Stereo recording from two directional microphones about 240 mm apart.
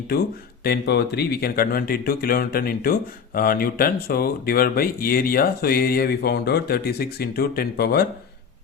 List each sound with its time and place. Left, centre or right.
0.6 s speech: left